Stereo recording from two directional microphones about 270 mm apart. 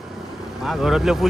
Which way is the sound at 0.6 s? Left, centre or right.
Centre.